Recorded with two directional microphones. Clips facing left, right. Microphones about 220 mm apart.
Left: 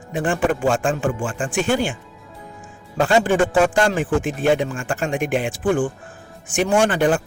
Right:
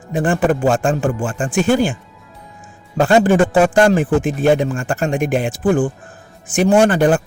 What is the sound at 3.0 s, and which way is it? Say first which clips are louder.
Speech: right 4 dB; 40° right (ahead or behind).